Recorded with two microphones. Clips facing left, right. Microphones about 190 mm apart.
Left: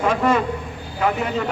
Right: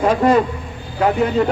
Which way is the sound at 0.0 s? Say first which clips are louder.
Right 5 dB; 35° right (ahead or behind).